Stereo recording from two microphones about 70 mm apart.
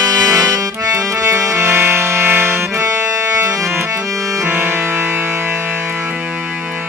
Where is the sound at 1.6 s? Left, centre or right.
Right.